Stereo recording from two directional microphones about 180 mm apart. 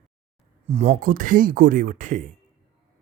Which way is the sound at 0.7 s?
35° right (ahead or behind).